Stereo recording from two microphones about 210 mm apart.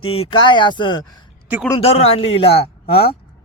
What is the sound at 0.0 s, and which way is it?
Speech, 25° left (ahead or behind).